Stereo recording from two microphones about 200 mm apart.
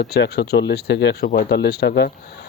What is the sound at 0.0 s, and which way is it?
Speech, 60° left (ahead or behind).